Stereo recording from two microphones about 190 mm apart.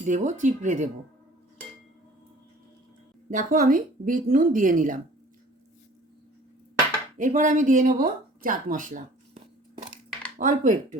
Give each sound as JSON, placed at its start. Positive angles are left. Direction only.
{"t": 0.0, "sound": "speech", "side_deg": -40}
{"t": 3.2, "sound": "speech", "side_deg": -40}
{"t": 7.2, "sound": "speech", "side_deg": -40}